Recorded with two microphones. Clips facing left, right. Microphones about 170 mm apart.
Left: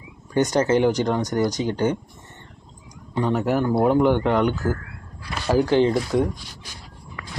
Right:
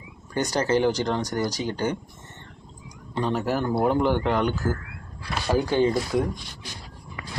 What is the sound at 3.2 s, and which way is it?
Speech, 15° left (ahead or behind).